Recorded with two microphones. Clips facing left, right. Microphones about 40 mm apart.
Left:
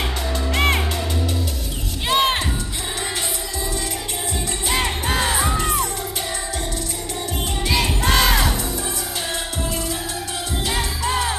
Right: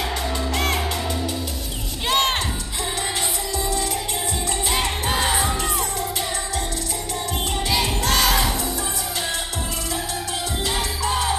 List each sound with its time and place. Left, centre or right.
0.6 s music: left
2.0 s music: centre
4.7 s music: centre
8.1 s music: centre